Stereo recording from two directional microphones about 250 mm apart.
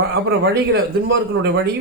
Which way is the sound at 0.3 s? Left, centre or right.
Right.